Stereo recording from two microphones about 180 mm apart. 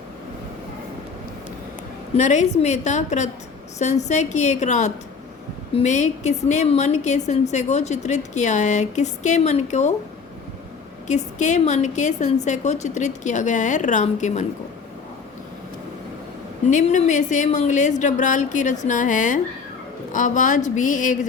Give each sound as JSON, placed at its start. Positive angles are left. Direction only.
{"t": 2.1, "sound": "a woman's voice", "side_deg": 40}
{"t": 11.1, "sound": "a woman's voice", "side_deg": 40}
{"t": 16.6, "sound": "speech", "side_deg": 40}